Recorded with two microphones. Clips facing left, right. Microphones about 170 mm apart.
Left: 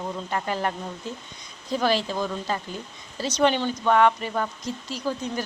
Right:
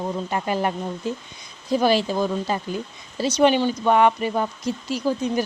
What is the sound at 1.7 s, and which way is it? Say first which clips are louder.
Speech: right 5 dB; 15° right (ahead or behind).